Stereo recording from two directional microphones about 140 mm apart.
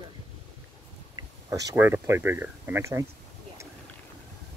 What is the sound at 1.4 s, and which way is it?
Speech, 25° right (ahead or behind).